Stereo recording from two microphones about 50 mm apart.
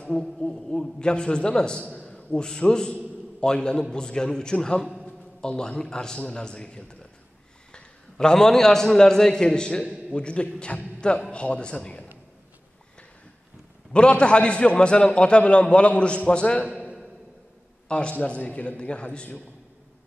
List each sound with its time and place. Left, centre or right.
0.1 s a man's voice: centre
5.0 s a sound: left
5.6 s a man's voice: centre
13.9 s a man's voice: left
16.6 s a sound: right
17.8 s a man's voice: left